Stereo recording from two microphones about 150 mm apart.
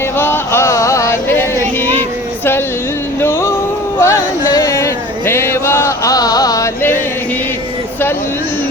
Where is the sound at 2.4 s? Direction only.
15° left (ahead or behind).